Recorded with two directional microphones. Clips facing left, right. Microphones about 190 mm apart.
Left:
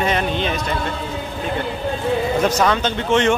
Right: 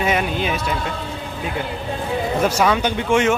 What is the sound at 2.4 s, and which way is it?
Speech, 10° right (ahead or behind).